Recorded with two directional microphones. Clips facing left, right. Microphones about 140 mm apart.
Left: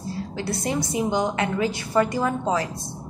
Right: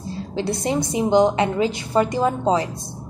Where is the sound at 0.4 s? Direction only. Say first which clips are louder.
Right 5 dB; 20° right (ahead or behind).